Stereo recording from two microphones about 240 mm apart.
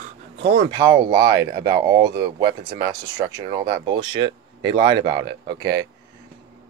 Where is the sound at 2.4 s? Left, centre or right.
Right.